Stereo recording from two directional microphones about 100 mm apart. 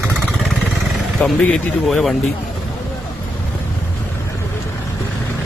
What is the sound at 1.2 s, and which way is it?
Speech, 5° left (ahead or behind).